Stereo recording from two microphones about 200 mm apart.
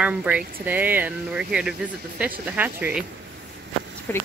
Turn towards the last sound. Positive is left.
turn(degrees=10)  # may be behind; listen again after turning